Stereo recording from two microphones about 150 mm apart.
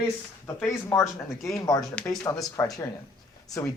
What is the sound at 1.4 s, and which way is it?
Speech, centre (ahead or behind).